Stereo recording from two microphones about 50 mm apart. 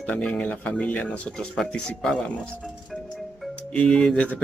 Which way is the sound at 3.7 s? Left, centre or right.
Left.